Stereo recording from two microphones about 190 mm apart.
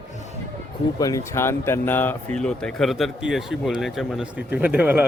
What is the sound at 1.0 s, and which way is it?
Speech, 15° left (ahead or behind).